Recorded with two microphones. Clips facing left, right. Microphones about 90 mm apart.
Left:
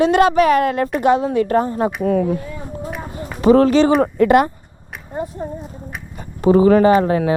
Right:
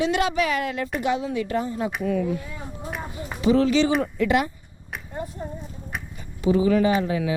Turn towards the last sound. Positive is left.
turn(degrees=50)  # may be behind; listen again after turning